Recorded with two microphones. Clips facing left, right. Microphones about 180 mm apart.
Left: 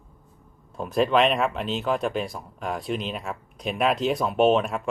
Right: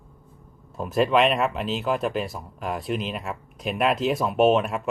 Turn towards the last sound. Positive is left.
turn(degrees=0)  # may be behind; listen again after turning